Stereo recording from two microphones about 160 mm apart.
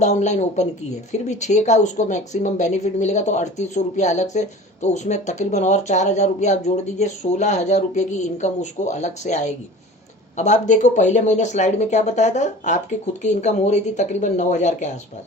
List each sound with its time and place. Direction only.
0.0 s speech: 45° left (ahead or behind)